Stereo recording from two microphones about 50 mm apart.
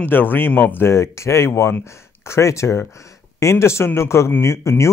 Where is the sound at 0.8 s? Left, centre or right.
Left.